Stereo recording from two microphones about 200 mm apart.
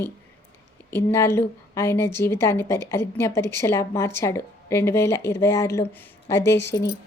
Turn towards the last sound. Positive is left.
turn(degrees=60)  # may be behind; listen again after turning